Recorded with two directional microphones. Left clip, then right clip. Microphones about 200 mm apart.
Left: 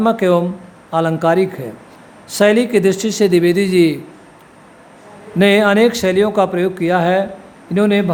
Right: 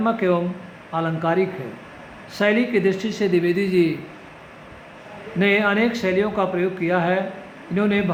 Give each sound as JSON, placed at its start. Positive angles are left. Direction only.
{"t": 0.0, "sound": "a man's voice", "side_deg": 65}
{"t": 5.4, "sound": "speech", "side_deg": 65}